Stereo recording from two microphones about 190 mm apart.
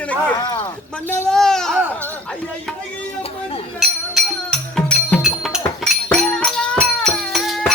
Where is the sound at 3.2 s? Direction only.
30° left (ahead or behind).